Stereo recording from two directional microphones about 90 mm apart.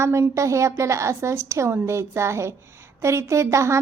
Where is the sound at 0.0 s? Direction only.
35° right (ahead or behind).